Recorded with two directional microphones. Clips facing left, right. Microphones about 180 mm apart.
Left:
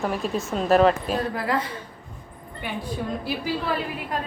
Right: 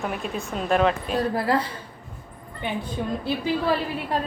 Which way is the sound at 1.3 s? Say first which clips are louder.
Right 3 dB; 30° right (ahead or behind).